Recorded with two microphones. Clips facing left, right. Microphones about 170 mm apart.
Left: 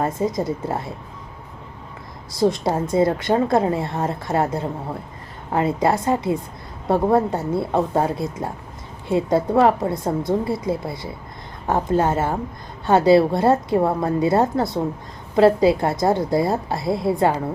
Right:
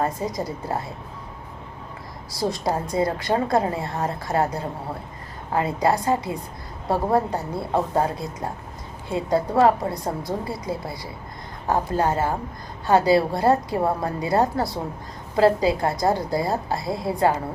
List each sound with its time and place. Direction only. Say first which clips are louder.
0.2 s a woman's voice: left 5 dB; 25° left (ahead or behind)
2.3 s a woman's voice: left 5 dB; 25° left (ahead or behind)